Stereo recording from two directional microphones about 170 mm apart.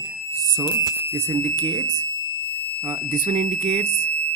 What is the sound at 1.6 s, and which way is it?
Speech, 20° right (ahead or behind).